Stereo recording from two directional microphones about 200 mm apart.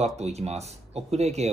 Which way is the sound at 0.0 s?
30° right (ahead or behind).